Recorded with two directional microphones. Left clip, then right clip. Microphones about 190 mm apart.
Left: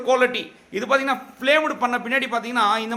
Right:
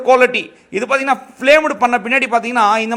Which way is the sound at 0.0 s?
40° right (ahead or behind).